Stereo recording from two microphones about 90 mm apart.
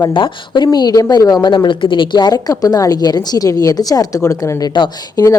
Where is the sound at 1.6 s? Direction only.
65° left (ahead or behind).